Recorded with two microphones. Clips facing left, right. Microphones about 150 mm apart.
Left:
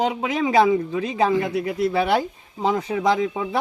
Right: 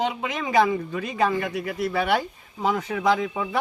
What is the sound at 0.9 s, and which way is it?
Speech, 25° left (ahead or behind).